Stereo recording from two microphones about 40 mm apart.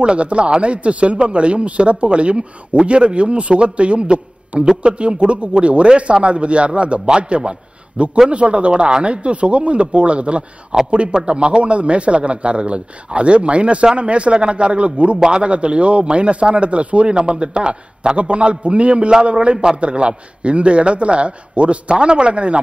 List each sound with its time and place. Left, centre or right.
0.0 s a man's voice: right
15.1 s a man's voice: centre
15.4 s a man's voice: right